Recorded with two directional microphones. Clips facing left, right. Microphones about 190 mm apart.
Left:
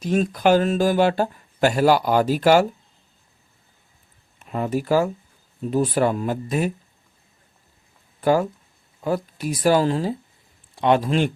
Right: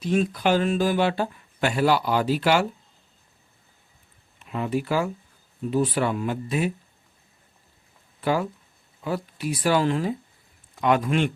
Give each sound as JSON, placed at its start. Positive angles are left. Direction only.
{"t": 0.0, "sound": "speech", "side_deg": 45}
{"t": 4.4, "sound": "speech", "side_deg": 45}
{"t": 8.2, "sound": "speech", "side_deg": 45}